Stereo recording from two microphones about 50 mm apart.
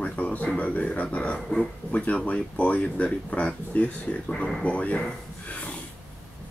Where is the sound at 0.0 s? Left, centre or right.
Left.